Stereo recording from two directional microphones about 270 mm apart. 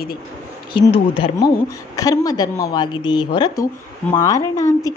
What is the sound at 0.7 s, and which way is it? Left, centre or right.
A woman's voice, centre.